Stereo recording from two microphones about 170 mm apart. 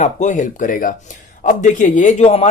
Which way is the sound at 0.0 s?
45° left (ahead or behind).